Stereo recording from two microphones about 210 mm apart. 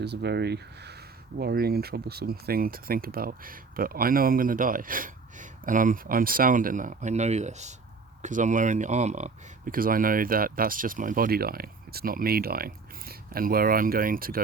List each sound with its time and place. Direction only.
0.0 s speech: 50° right (ahead or behind)